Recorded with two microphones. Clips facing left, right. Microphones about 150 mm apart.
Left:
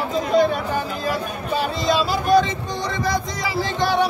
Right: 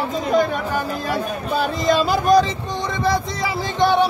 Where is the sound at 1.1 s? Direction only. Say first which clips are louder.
Right 5 dB; 50° right (ahead or behind).